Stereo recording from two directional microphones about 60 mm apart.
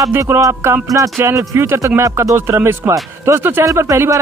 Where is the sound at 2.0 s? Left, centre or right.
Right.